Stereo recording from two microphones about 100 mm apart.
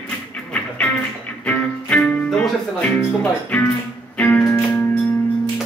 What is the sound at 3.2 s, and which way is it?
Speech, 20° left (ahead or behind).